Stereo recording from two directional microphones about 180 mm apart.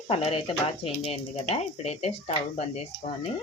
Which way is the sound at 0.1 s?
30° left (ahead or behind).